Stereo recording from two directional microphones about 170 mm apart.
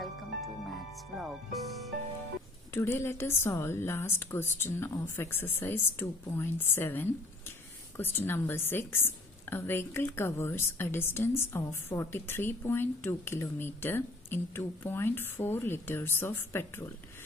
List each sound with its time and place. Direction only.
0.0 s music: centre (ahead or behind)
2.7 s a woman's voice: 15° left (ahead or behind)